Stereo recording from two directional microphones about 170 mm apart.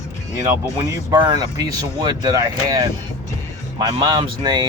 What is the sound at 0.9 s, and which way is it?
Speech, 25° right (ahead or behind).